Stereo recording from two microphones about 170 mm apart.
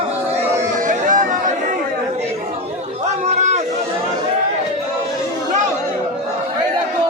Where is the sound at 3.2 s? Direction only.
40° right (ahead or behind).